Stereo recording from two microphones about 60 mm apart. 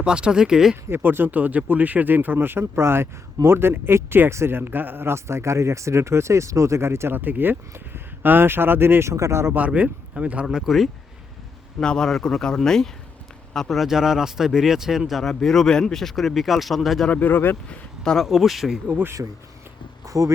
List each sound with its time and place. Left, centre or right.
0.0 s speech: centre
0.9 s speech: right
7.1 s speech: right
9.1 s speech: right
9.6 s speech: right
10.4 s speech: centre
11.8 s speech: centre
17.1 s speech: left
17.7 s speech: centre
18.3 s speech: centre
19.2 s speech: right